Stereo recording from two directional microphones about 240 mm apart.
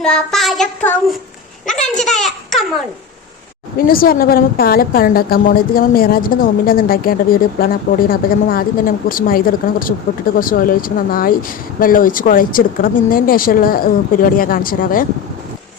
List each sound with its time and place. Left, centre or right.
0.0 s child singing: centre
1.6 s a child's voice: centre
3.8 s a woman's voice: left